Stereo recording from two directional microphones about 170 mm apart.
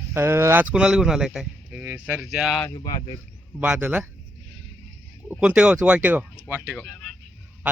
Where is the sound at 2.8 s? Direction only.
25° left (ahead or behind).